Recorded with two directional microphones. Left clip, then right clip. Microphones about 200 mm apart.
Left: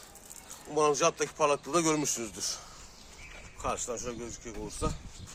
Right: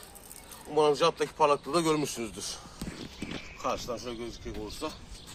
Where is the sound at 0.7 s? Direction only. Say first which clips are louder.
Right 2 dB; 45° left (ahead or behind).